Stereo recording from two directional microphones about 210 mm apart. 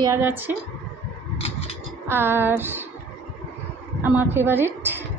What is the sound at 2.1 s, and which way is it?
Speech, 10° right (ahead or behind).